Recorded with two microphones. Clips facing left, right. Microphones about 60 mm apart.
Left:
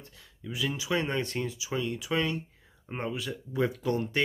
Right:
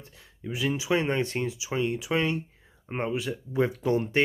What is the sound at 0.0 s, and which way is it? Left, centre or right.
Speech, right.